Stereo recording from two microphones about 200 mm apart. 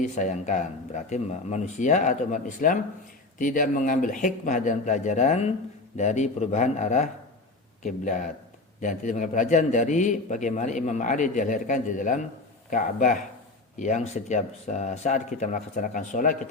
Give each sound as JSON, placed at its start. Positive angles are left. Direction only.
{"t": 0.0, "sound": "a man's voice", "side_deg": 35}